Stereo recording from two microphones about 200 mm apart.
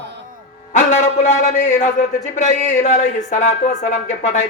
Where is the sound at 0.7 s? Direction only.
35° left (ahead or behind).